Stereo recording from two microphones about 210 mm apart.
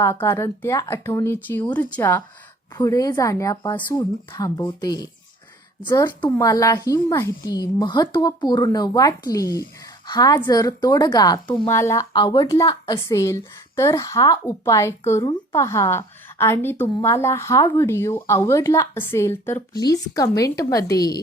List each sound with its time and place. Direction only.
0.0 s a woman's voice: 10° left (ahead or behind)